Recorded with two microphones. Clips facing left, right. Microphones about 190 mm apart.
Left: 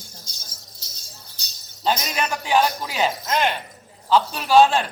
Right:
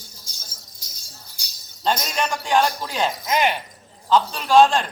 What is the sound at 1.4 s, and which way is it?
Jingle bell, 10° right (ahead or behind).